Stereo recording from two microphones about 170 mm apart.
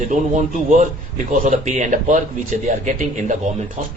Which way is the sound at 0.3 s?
45° right (ahead or behind).